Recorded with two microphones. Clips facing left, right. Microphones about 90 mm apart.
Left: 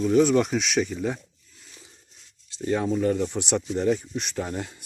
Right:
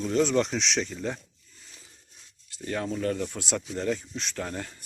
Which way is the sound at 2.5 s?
15° left (ahead or behind).